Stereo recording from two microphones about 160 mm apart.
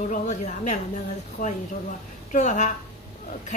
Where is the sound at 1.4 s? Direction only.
60° left (ahead or behind).